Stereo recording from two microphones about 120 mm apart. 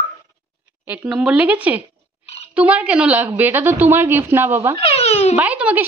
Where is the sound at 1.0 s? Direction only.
5° right (ahead or behind).